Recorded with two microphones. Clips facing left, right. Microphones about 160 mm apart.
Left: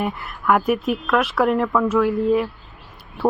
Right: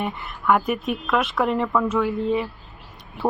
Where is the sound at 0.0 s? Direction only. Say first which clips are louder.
Left 2 dB; centre (ahead or behind).